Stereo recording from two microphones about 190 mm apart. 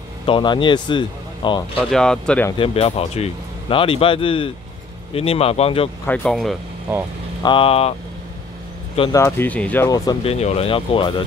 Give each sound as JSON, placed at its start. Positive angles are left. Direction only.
{"t": 0.3, "sound": "speech", "side_deg": 25}
{"t": 1.9, "sound": "speech", "side_deg": 5}
{"t": 2.5, "sound": "speech", "side_deg": 30}
{"t": 6.0, "sound": "speech", "side_deg": 5}
{"t": 7.4, "sound": "speech", "side_deg": 30}
{"t": 9.1, "sound": "speech", "side_deg": 15}
{"t": 9.8, "sound": "speech", "side_deg": 20}
{"t": 10.2, "sound": "speech", "side_deg": 35}